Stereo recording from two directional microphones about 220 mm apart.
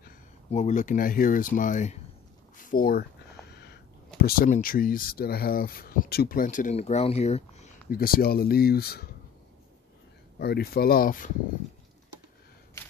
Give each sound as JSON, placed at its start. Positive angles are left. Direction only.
{"t": 0.5, "sound": "speech", "side_deg": 30}
{"t": 4.2, "sound": "speech", "side_deg": 40}
{"t": 10.4, "sound": "speech", "side_deg": 45}